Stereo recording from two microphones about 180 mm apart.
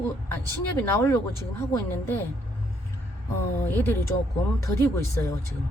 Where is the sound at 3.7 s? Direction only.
10° left (ahead or behind).